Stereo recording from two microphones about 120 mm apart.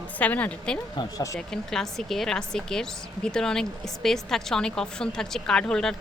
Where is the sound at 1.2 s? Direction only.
25° left (ahead or behind).